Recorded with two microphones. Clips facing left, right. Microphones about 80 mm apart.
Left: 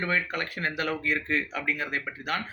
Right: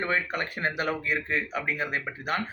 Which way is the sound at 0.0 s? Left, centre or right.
Right.